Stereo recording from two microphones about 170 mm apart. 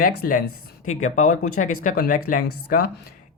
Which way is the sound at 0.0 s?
50° left (ahead or behind).